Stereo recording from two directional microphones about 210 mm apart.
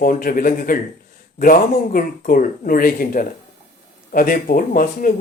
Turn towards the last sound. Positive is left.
turn(degrees=40)  # may be behind; listen again after turning